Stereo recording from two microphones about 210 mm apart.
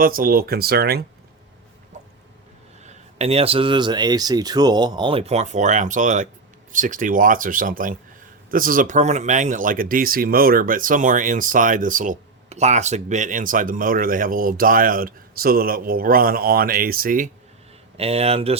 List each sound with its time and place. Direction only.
0.0 s speech: 40° right (ahead or behind)
2.8 s speech: 30° right (ahead or behind)
17.9 s speech: 30° right (ahead or behind)